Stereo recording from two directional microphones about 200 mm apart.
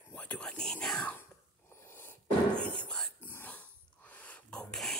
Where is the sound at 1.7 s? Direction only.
10° left (ahead or behind).